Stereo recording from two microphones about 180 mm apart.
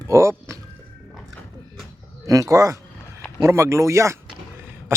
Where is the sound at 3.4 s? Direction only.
15° right (ahead or behind).